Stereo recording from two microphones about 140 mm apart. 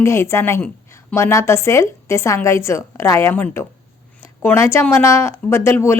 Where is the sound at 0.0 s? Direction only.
20° left (ahead or behind).